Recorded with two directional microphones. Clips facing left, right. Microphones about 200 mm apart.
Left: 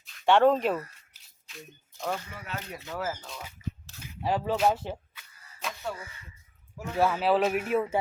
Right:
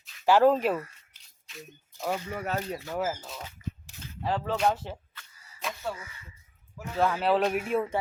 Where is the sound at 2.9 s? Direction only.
20° right (ahead or behind).